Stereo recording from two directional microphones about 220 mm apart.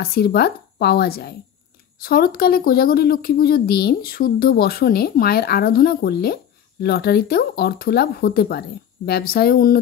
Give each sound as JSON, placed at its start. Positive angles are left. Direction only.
{"t": 0.0, "sound": "speech", "side_deg": 45}